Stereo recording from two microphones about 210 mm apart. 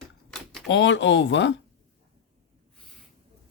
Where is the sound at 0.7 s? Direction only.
60° left (ahead or behind).